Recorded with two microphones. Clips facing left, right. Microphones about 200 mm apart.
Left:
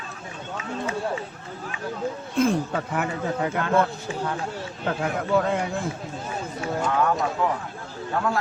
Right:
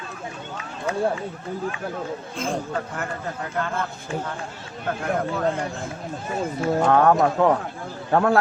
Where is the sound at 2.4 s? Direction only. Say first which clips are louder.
Left 6 dB; 65° left (ahead or behind).